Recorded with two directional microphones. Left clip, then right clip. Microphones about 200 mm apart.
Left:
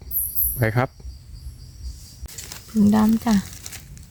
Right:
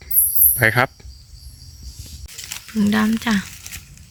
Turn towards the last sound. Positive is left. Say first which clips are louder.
# right 1 dB
turn(degrees=30)  # may be behind; listen again after turning